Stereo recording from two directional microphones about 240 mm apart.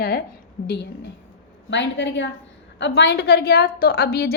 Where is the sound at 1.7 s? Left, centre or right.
Left.